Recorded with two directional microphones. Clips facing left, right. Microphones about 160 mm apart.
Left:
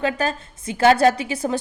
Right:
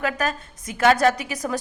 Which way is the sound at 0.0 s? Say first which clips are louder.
Left 2 dB; 30° left (ahead or behind).